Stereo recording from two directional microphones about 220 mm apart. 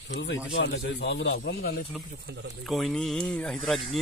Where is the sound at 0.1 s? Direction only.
55° left (ahead or behind).